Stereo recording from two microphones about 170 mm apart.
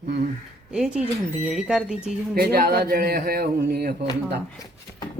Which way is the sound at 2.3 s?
65° right (ahead or behind).